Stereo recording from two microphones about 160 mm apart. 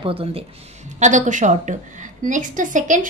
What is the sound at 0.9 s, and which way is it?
A woman's voice, 50° right (ahead or behind).